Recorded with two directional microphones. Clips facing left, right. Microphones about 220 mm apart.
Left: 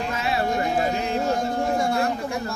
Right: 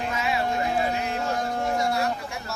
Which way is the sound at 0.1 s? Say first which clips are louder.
Left 1 dB; 40° left (ahead or behind).